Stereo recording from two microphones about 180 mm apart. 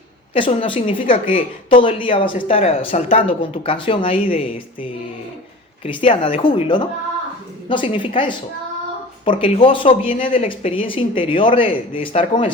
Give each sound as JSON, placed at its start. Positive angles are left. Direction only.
{"t": 0.3, "sound": "speech", "side_deg": 30}